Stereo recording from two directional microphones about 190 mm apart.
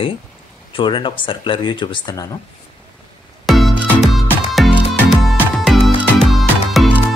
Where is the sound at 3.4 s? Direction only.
Centre (ahead or behind).